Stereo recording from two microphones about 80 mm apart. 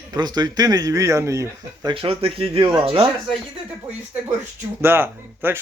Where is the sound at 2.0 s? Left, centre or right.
Right.